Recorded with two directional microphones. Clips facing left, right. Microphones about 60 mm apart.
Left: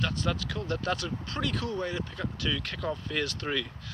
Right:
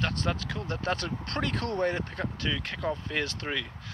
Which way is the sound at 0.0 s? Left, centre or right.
Right.